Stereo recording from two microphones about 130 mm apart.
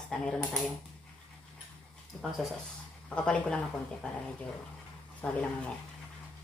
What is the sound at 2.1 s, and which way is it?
Speech, 10° left (ahead or behind).